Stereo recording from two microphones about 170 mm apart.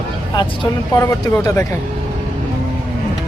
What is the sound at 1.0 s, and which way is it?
Speech, 15° left (ahead or behind).